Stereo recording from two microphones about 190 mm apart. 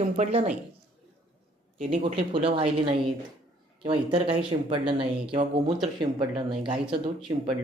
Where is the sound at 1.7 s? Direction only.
35° right (ahead or behind).